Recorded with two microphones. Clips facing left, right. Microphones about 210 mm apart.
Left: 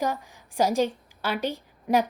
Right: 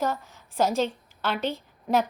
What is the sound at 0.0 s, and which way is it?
A woman's voice, 15° left (ahead or behind).